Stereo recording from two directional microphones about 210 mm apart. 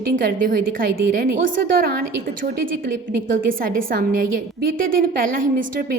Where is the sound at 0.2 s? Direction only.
45° right (ahead or behind).